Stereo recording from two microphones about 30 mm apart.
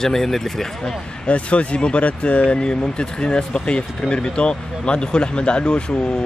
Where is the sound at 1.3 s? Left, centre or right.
Left.